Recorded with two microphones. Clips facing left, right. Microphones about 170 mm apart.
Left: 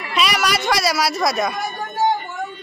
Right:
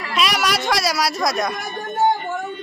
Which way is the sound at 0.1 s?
Centre (ahead or behind).